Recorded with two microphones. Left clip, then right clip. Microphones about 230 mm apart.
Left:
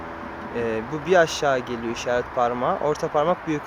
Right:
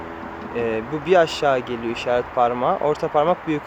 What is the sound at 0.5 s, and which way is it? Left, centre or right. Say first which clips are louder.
Speech: right 3 dB; centre.